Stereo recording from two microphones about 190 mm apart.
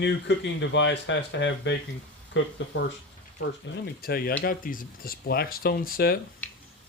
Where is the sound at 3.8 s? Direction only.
55° left (ahead or behind).